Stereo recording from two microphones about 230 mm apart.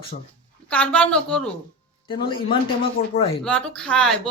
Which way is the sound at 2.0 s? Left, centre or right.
Left.